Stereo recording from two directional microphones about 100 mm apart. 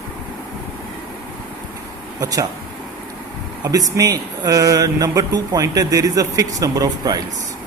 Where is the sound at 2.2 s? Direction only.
35° right (ahead or behind).